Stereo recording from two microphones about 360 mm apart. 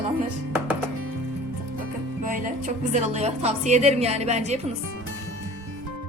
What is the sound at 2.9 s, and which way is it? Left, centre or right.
A woman's voice, centre.